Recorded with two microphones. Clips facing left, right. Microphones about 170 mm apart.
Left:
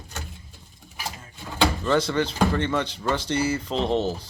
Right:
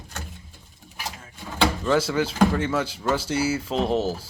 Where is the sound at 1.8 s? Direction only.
5° right (ahead or behind).